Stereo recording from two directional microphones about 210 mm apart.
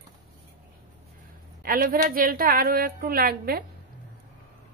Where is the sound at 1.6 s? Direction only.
45° right (ahead or behind).